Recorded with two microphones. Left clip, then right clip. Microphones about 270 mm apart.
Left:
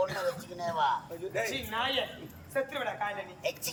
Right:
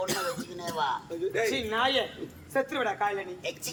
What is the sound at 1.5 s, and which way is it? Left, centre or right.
A woman's voice, centre.